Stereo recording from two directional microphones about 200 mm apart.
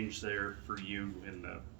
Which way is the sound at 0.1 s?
60° left (ahead or behind).